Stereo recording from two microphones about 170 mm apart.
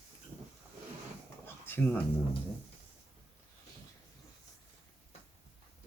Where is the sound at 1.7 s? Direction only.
10° left (ahead or behind).